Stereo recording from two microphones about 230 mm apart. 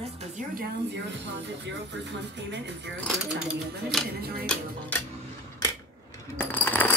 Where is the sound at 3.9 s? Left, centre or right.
Centre.